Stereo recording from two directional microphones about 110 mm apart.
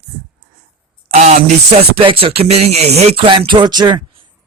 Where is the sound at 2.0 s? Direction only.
55° right (ahead or behind); by 3.2 s 70° right (ahead or behind).